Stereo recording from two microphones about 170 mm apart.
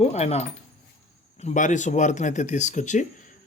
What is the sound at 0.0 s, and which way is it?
Speech, 40° left (ahead or behind).